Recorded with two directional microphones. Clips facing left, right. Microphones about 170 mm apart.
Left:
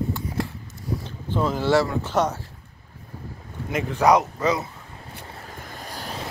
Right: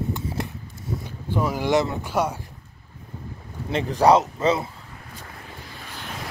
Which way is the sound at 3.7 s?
30° right (ahead or behind).